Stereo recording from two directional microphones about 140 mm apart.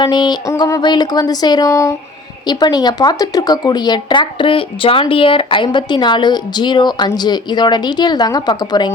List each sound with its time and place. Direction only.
0.0 s speech: 30° left (ahead or behind)
0.4 s speech: 20° left (ahead or behind)